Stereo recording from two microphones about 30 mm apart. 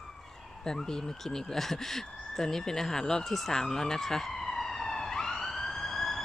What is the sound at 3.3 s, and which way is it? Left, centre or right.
Emergency vehicle, centre.